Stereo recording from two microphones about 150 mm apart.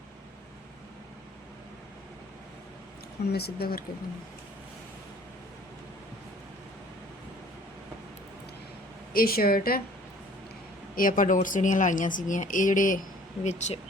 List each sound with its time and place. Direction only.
3.3 s speech: 90° left
9.1 s a woman's voice: 80° left
10.9 s speech: 65° left (ahead or behind)